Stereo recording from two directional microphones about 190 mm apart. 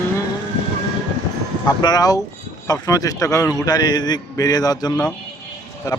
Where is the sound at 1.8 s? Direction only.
20° left (ahead or behind).